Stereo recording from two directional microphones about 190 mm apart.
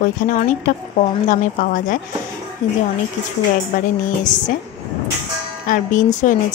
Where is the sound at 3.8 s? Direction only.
45° left (ahead or behind).